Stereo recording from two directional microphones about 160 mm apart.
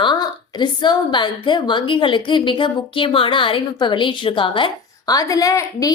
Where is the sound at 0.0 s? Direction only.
25° left (ahead or behind).